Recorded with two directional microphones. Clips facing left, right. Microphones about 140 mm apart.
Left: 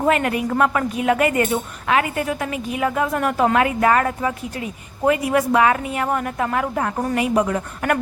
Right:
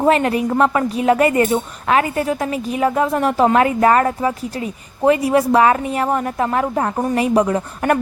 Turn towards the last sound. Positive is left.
turn(degrees=-30)  # may be behind; listen again after turning